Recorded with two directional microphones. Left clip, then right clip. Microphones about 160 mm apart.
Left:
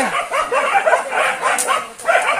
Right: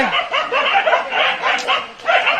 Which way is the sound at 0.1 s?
35° left (ahead or behind).